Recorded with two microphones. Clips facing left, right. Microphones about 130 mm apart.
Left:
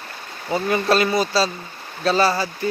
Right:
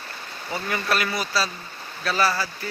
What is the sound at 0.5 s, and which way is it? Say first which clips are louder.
Speech: left 7 dB; 25° left (ahead or behind).